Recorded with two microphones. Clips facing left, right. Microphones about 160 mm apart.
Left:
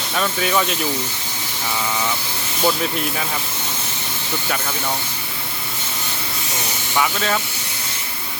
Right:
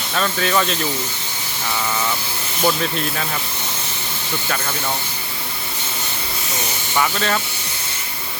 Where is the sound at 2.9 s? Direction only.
10° left (ahead or behind).